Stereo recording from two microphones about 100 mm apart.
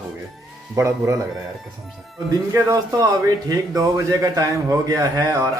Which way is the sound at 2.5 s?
35° right (ahead or behind).